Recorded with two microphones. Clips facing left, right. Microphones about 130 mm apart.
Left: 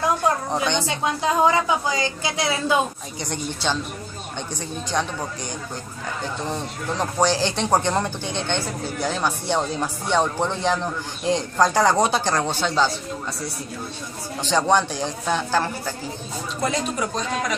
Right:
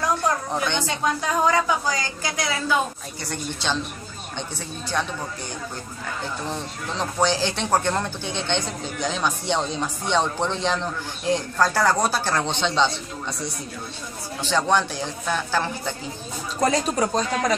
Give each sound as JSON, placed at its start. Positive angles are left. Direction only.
{"t": 0.5, "sound": "a woman's voice", "side_deg": 20}
{"t": 4.4, "sound": "speech", "side_deg": 15}
{"t": 6.4, "sound": "speech", "side_deg": 15}
{"t": 14.4, "sound": "speech", "side_deg": 15}
{"t": 16.6, "sound": "a man's voice", "side_deg": -35}